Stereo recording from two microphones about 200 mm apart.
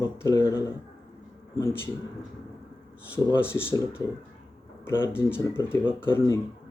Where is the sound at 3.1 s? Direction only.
15° left (ahead or behind).